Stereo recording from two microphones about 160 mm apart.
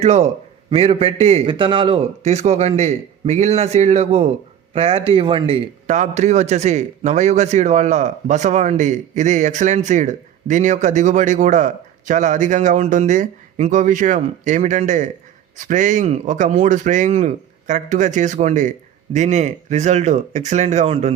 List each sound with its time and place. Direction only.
0.0 s a man's voice: 40° right (ahead or behind)